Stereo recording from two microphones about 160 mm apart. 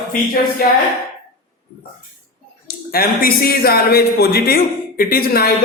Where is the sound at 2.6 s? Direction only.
70° left (ahead or behind).